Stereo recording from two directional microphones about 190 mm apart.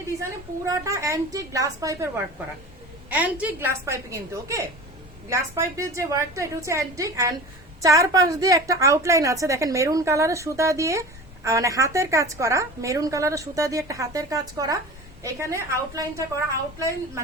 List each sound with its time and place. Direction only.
0.2 s a woman's voice: 15° right (ahead or behind)